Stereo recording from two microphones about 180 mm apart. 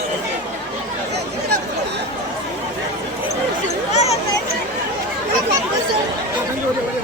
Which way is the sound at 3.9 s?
35° left (ahead or behind).